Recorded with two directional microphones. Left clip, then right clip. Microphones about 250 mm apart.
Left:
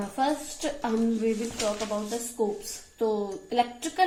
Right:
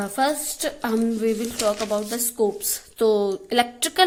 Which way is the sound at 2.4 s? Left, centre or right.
Right.